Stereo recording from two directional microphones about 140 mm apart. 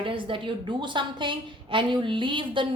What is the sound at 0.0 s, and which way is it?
A woman's voice, 40° right (ahead or behind).